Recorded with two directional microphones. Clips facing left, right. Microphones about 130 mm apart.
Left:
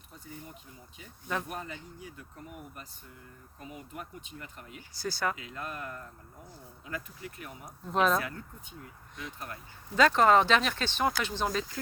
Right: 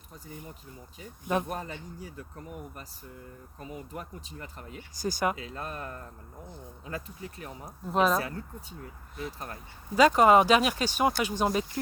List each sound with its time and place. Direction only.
1.2 s speech: 20° right (ahead or behind)
1.5 s speech: 40° right (ahead or behind)
3.6 s speech: 35° right (ahead or behind)
4.9 s speech: 15° right (ahead or behind)
5.4 s speech: 35° right (ahead or behind)
7.9 s speech: 5° right (ahead or behind)
8.2 s speech: 35° right (ahead or behind)
9.9 s speech: 10° right (ahead or behind)